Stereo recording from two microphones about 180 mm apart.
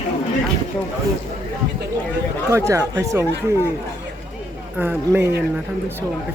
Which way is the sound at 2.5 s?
15° right (ahead or behind).